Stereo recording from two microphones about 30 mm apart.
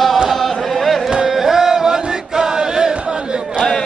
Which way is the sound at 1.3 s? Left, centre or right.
Centre.